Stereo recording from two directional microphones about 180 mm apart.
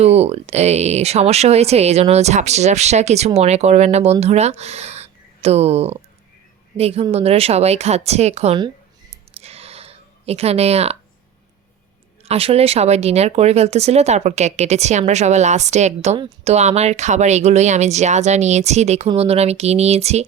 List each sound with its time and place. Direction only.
0.0 s speech: 35° right (ahead or behind)
9.4 s a sound: 35° right (ahead or behind)
12.3 s speech: 35° right (ahead or behind)